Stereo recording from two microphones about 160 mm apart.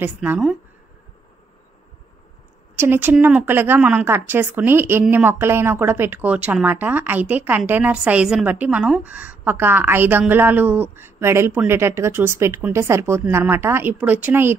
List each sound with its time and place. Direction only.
0.0 s a woman's voice: 10° right (ahead or behind)
2.7 s a woman's voice: 15° right (ahead or behind)